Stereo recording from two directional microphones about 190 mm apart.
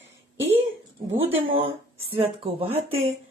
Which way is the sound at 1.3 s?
30° right (ahead or behind).